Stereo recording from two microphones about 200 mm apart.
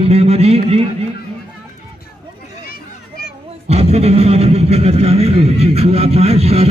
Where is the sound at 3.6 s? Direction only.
30° right (ahead or behind).